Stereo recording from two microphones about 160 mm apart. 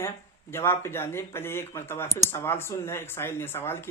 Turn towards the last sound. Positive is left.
turn(degrees=15)  # may be behind; listen again after turning